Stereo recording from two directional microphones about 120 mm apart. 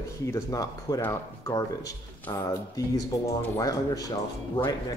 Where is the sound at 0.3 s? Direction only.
30° left (ahead or behind).